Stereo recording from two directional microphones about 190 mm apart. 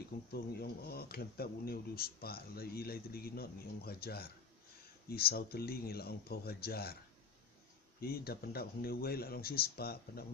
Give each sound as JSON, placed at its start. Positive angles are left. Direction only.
{"t": 0.3, "sound": "speech", "side_deg": 55}
{"t": 8.0, "sound": "speech", "side_deg": 55}